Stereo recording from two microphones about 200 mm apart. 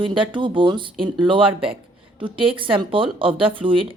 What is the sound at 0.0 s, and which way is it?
Speech, 25° right (ahead or behind).